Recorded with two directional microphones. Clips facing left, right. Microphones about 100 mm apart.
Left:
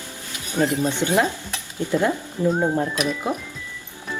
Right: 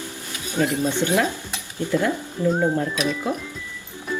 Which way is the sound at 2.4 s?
10° left (ahead or behind).